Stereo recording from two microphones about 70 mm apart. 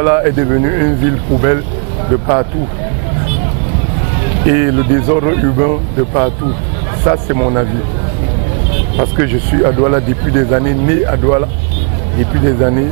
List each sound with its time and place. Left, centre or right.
0.0 s speech: right
4.2 s speech: centre
8.9 s speech: centre